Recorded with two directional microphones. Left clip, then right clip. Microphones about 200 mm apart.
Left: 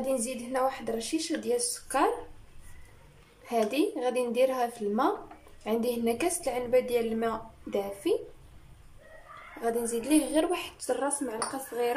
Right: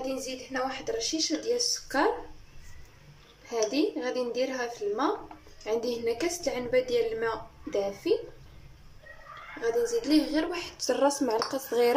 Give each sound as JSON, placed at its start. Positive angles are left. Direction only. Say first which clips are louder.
{"t": 0.5, "sound": "a woman's voice", "louder": "left 3 dB", "side_deg": 20}
{"t": 3.4, "sound": "a woman's voice", "louder": "even", "side_deg": 10}
{"t": 9.6, "sound": "a woman's voice", "louder": "right 3 dB", "side_deg": 15}
{"t": 10.9, "sound": "speech", "louder": "right 5 dB", "side_deg": -10}
{"t": 11.2, "sound": "speech", "louder": "right 6 dB", "side_deg": -25}